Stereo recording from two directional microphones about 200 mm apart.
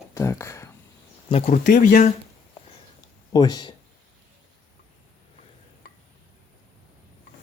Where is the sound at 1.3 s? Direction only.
35° left (ahead or behind).